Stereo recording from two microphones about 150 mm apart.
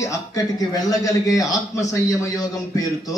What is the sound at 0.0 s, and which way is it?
A man's voice, 20° left (ahead or behind).